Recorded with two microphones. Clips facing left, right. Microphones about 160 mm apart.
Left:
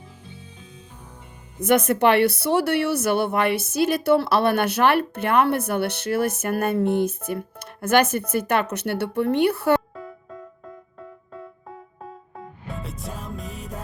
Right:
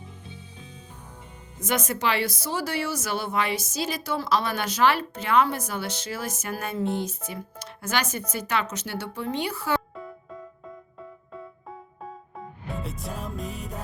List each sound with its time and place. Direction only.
1.5 s speech: 60° left (ahead or behind)
9.9 s music: centre (ahead or behind)
12.4 s music: centre (ahead or behind)